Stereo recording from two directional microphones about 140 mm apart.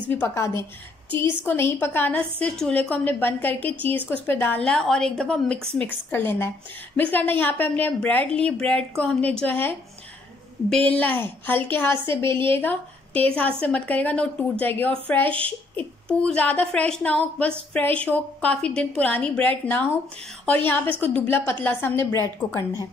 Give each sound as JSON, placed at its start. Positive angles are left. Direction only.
{"t": 0.1, "sound": "a woman's voice", "side_deg": 15}
{"t": 10.9, "sound": "a woman's voice", "side_deg": 10}